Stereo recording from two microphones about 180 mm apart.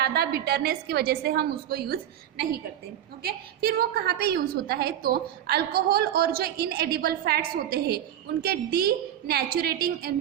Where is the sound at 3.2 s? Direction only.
60° right (ahead or behind).